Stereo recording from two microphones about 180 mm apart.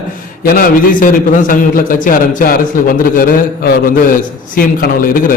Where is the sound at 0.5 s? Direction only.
50° left (ahead or behind).